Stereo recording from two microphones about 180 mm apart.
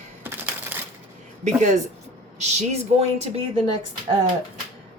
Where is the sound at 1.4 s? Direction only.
40° right (ahead or behind).